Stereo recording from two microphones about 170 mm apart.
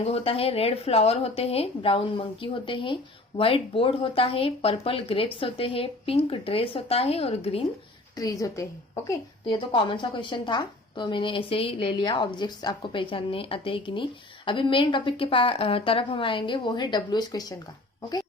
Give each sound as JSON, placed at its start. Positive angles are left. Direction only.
{"t": 0.0, "sound": "a woman's voice", "side_deg": 35}
{"t": 8.1, "sound": "speech", "side_deg": 20}